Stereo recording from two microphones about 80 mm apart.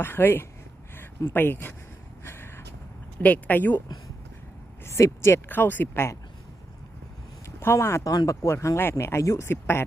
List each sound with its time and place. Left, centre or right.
0.0 s speech: left
2.2 s a sound: left
3.2 s speech: centre
4.8 s speech: left
7.4 s speech: left